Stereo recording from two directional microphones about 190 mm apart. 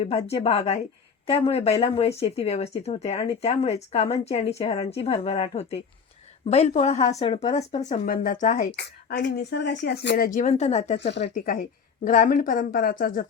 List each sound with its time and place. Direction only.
0.0 s speech: 30° left (ahead or behind)
8.7 s speech: 65° left (ahead or behind); by 11.1 s 35° left (ahead or behind)
11.2 s speech: 45° left (ahead or behind)